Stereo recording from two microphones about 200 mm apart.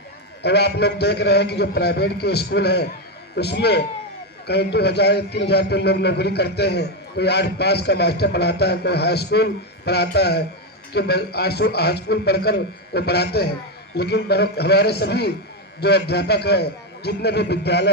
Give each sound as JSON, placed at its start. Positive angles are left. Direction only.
{"t": 0.4, "sound": "a man's voice", "side_deg": 55}